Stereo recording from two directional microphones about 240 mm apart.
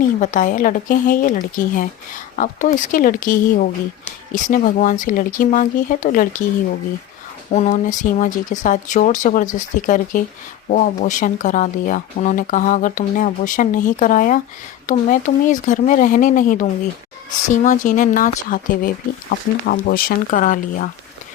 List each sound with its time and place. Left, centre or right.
0.0 s speech: left
7.5 s speech: left